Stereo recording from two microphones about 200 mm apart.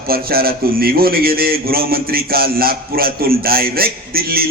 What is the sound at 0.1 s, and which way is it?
Speech, 50° right (ahead or behind).